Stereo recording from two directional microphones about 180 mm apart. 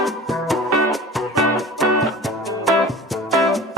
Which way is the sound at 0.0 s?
Centre (ahead or behind).